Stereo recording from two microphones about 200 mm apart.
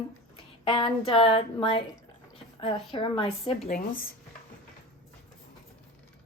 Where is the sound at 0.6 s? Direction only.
25° left (ahead or behind).